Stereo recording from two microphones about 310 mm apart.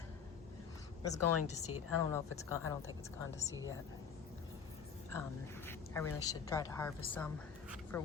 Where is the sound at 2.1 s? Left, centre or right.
Centre.